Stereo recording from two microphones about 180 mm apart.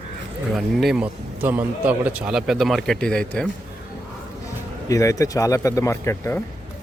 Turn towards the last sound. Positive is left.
turn(degrees=15)  # may be behind; listen again after turning